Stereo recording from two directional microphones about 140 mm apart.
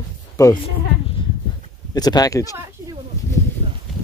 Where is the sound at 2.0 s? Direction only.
30° left (ahead or behind).